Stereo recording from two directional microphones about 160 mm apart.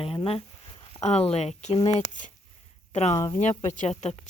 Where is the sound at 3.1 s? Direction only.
20° left (ahead or behind).